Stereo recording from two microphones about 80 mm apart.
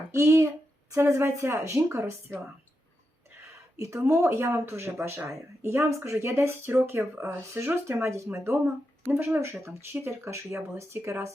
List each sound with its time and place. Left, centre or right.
0.1 s speech: right
3.8 s speech: right
8.3 s speech: right